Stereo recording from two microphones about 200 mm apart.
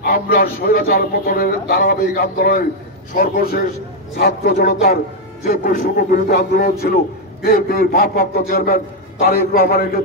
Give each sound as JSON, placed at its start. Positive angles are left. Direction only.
{"t": 0.0, "sound": "a man's voice", "side_deg": 45}